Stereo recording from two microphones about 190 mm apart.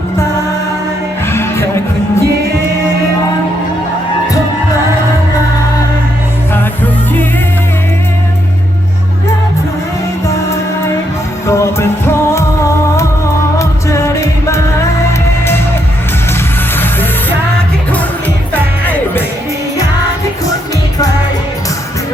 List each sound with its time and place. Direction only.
1.3 s music: 15° left (ahead or behind)
11.4 s music: 15° left (ahead or behind)
13.6 s music: 15° left (ahead or behind)
16.7 s music: 10° left (ahead or behind)
18.5 s music: 10° left (ahead or behind)